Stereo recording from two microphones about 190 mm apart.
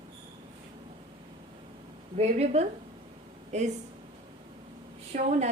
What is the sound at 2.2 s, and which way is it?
A woman's voice, 35° right (ahead or behind).